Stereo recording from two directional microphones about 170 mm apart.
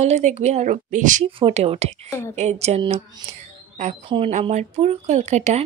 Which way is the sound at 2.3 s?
40° right (ahead or behind).